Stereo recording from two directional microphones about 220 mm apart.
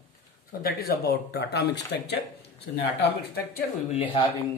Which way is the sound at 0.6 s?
45° left (ahead or behind).